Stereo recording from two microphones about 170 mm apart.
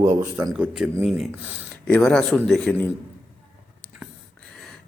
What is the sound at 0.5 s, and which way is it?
Speech, 5° right (ahead or behind).